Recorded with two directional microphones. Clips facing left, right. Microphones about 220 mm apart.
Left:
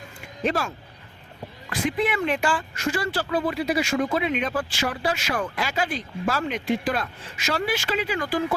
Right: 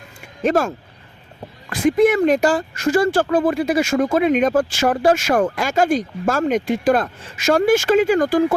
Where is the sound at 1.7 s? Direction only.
45° right (ahead or behind).